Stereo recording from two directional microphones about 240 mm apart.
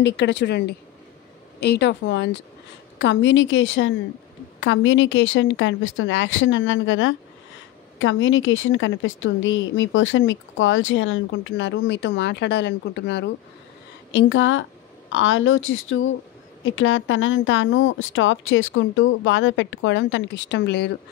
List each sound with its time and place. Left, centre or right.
0.0 s a woman's voice: left